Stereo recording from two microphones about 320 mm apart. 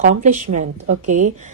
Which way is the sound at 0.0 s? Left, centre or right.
Right.